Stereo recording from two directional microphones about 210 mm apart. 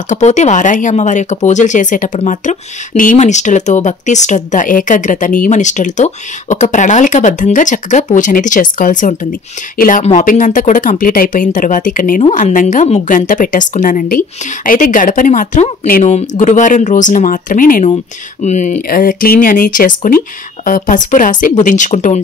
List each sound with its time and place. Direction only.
0.1 s speech: 35° left (ahead or behind)